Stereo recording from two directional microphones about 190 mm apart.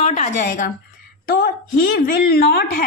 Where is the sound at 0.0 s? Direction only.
40° left (ahead or behind).